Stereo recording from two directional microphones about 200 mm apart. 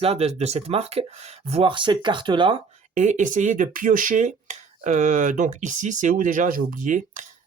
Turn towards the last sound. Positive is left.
turn(degrees=-40)  # may be behind; listen again after turning